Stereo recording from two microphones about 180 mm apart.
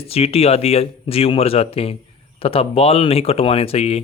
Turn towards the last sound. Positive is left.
turn(degrees=35)  # may be behind; listen again after turning